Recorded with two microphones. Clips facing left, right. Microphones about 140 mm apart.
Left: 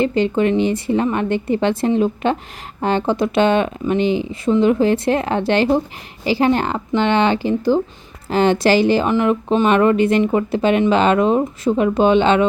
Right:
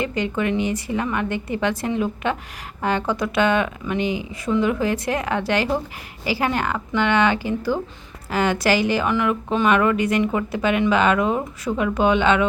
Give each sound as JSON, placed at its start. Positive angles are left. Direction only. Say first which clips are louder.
{"t": 0.0, "sound": "speech", "louder": "left 7 dB", "side_deg": 30}